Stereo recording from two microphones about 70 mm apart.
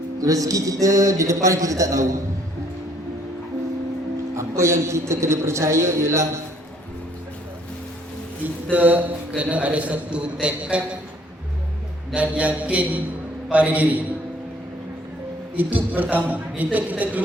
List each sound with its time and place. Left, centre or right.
0.2 s a man's voice: right
4.4 s a man's voice: right
8.7 s a man's voice: right
12.1 s speech: centre
15.5 s speech: right